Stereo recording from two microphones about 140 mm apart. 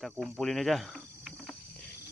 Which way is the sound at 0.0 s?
Centre (ahead or behind).